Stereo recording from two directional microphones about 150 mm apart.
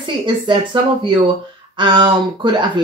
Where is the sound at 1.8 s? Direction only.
30° right (ahead or behind).